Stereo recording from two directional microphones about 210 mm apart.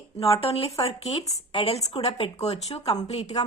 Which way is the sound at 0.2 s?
30° left (ahead or behind).